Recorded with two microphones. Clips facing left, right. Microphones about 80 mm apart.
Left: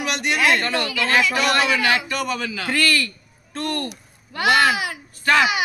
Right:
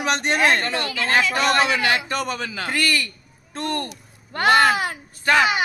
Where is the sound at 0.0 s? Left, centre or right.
Right.